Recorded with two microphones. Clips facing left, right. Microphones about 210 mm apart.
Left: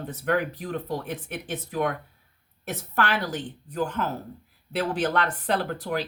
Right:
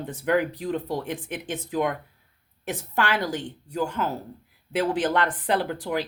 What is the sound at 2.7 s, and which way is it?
Speech, 15° right (ahead or behind).